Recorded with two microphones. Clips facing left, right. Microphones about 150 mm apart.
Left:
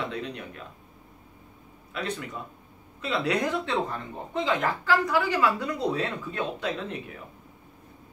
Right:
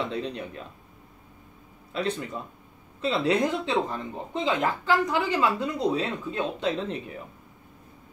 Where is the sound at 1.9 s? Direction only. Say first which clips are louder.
Right 4 dB; 30° right (ahead or behind).